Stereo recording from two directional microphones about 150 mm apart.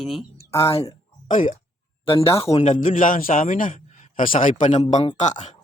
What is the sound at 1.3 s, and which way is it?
A man's voice, 55° left (ahead or behind).